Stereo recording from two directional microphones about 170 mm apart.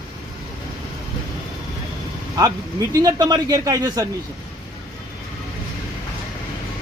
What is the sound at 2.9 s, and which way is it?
A man's voice, 20° right (ahead or behind).